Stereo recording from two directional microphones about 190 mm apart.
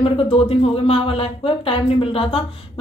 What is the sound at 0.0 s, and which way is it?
Speech, 30° left (ahead or behind).